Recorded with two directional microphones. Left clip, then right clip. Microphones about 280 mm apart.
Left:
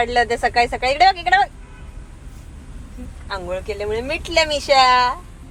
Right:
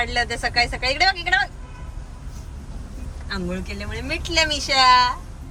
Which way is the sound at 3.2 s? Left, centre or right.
Centre.